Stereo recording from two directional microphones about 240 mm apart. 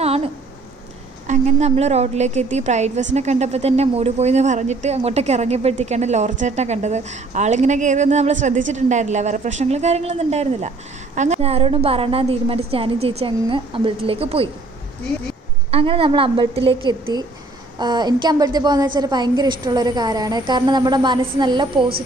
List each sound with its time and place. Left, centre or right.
1.3 s a woman's voice: right
15.7 s a woman's voice: right